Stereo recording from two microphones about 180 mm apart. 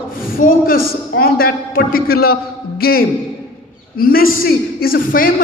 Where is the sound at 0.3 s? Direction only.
50° left (ahead or behind).